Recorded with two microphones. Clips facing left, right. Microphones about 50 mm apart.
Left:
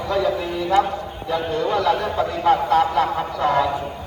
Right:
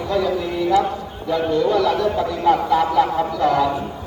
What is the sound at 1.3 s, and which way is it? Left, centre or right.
Speech, left.